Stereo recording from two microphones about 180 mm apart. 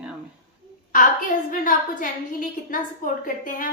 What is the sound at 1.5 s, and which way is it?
A woman's voice, 50° left (ahead or behind).